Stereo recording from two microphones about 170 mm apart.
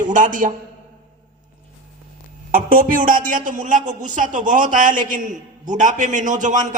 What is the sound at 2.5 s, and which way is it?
A man's voice, 55° right (ahead or behind).